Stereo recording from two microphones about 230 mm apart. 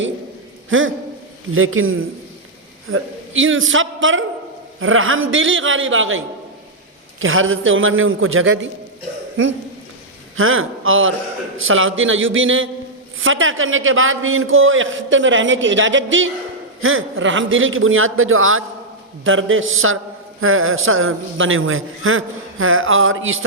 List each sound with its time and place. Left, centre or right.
0.7 s a man's voice: right
10.3 s a man's voice: right